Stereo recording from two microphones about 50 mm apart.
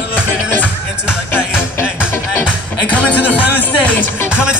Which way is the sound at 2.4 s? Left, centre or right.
Left.